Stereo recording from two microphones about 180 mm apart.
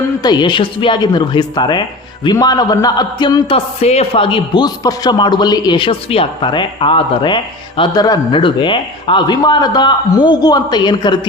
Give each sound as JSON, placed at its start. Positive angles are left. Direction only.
{"t": 0.2, "sound": "a man's voice", "side_deg": 25}